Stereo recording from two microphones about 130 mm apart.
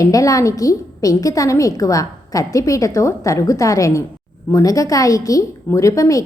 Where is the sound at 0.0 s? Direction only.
25° left (ahead or behind).